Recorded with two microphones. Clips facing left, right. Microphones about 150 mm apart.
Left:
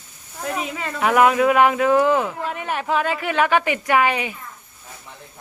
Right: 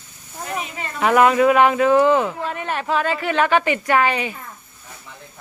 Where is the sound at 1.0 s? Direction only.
5° left (ahead or behind).